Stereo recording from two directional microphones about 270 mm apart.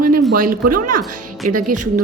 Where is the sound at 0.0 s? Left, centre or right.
Right.